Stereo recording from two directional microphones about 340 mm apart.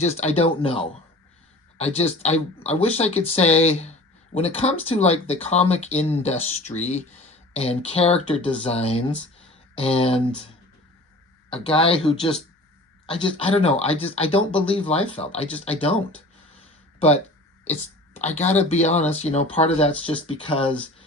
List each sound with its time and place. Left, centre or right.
0.0 s speech: centre
11.5 s speech: centre
16.6 s a sound: centre
17.7 s speech: centre